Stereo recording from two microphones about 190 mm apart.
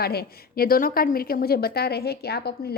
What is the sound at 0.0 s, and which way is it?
A woman's voice, 55° left (ahead or behind).